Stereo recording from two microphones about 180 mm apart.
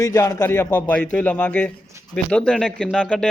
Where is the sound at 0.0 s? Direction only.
15° left (ahead or behind).